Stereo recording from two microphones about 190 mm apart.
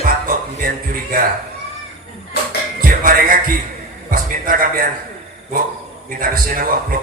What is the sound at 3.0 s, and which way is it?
A man's voice, 45° right (ahead or behind).